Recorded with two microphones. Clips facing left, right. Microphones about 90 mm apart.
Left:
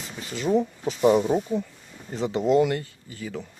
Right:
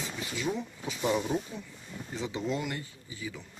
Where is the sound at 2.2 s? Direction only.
55° left (ahead or behind).